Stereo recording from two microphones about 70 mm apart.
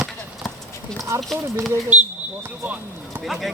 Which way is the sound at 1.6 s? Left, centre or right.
Right.